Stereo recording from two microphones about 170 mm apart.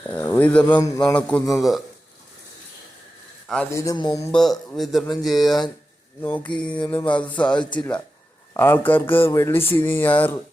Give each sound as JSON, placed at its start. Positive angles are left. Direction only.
{"t": 0.1, "sound": "speech", "side_deg": 10}
{"t": 0.8, "sound": "speech", "side_deg": 20}
{"t": 1.1, "sound": "speech", "side_deg": 10}
{"t": 3.7, "sound": "speech", "side_deg": 20}
{"t": 4.3, "sound": "speech", "side_deg": 5}